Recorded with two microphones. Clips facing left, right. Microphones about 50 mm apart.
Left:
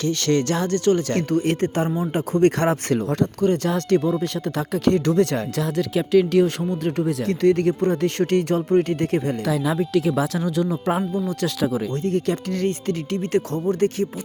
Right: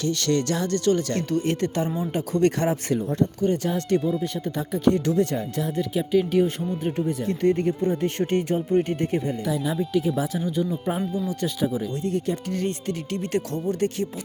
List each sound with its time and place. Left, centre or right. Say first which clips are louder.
0.0 s speech: left 3 dB; left
2.6 s speech: left 3 dB; left
4.9 s speech: left 3 dB; left
9.9 s speech: left 3 dB; left
12.0 s speech: left 4 dB; left